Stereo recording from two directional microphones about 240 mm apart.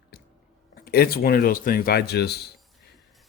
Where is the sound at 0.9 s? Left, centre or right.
Left.